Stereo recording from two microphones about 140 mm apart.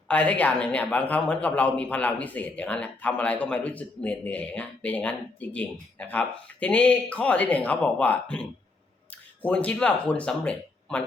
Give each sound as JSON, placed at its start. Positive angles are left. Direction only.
{"t": 0.1, "sound": "speech", "side_deg": 10}